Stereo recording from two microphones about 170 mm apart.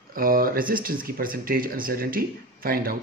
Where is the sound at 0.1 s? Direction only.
55° right (ahead or behind).